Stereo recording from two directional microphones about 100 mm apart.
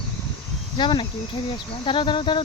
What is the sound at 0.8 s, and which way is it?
Speech, 60° left (ahead or behind).